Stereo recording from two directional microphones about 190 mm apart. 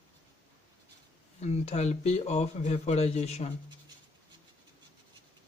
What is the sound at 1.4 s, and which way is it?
A man's voice, 35° left (ahead or behind).